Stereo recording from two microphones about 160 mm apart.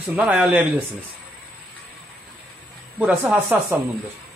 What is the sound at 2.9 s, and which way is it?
Speech, 10° right (ahead or behind).